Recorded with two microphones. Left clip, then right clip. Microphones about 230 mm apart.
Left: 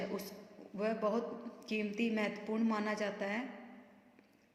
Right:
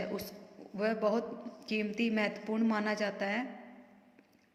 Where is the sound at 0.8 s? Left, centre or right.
Centre.